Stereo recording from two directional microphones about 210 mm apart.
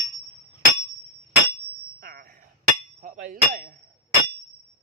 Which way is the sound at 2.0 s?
45° right (ahead or behind).